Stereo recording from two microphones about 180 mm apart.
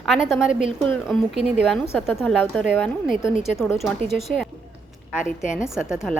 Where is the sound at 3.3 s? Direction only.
40° left (ahead or behind).